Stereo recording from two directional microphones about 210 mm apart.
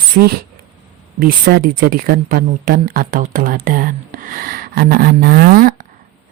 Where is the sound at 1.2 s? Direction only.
45° right (ahead or behind).